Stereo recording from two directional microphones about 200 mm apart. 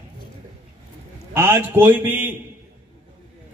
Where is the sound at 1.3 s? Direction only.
10° right (ahead or behind).